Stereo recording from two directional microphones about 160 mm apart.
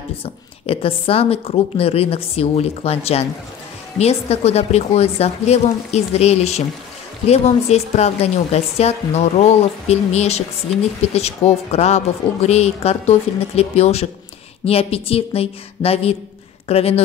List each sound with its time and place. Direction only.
0.2 s a woman's voice: 35° left (ahead or behind)